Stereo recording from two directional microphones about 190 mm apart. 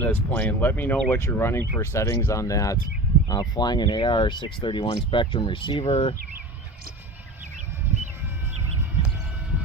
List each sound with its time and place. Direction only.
0.0 s speech: 10° left (ahead or behind); by 6.1 s 30° left (ahead or behind)